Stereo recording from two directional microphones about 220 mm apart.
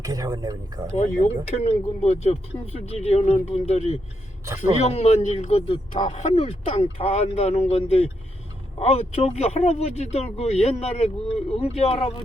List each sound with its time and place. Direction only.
0.0 s speech: 15° right (ahead or behind)
0.9 s speech: 30° left (ahead or behind)